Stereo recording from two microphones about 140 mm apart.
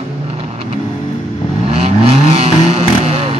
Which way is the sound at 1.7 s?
50° right (ahead or behind).